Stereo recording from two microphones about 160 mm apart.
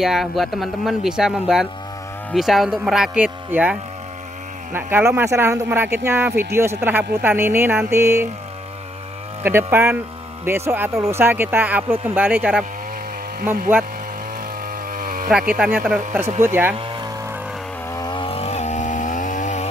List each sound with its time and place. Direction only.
0.0 s speech: centre (ahead or behind)
4.7 s speech: 15° right (ahead or behind)
9.4 s speech: 15° right (ahead or behind)
14.9 s a sound: 60° right (ahead or behind)
15.3 s speech: 5° right (ahead or behind)
16.7 s vehicle: 30° right (ahead or behind)
17.8 s chainsaw: 20° left (ahead or behind)
18.1 s chainsaw: 35° left (ahead or behind); by 19.7 s 50° left (ahead or behind)